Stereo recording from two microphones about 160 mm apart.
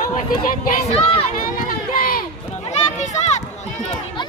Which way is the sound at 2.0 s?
65° left (ahead or behind).